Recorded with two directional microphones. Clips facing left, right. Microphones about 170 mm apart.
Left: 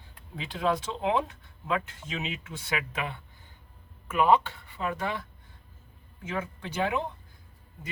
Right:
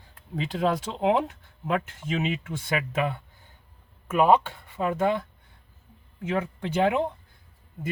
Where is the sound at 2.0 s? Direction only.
50° right (ahead or behind).